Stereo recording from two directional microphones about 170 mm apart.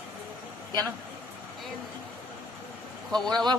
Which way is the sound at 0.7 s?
20° right (ahead or behind).